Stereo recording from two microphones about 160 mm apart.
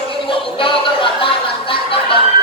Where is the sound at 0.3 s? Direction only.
35° left (ahead or behind).